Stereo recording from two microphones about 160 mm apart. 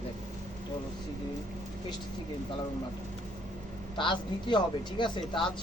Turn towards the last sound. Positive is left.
turn(degrees=30)  # may be behind; listen again after turning